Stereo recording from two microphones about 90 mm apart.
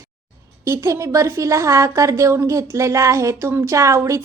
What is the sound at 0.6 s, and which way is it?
A woman's voice, 30° right (ahead or behind).